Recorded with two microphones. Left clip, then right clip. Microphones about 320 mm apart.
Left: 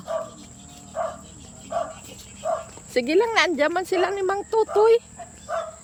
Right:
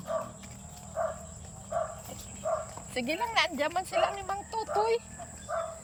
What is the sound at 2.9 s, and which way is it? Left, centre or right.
Speech, centre.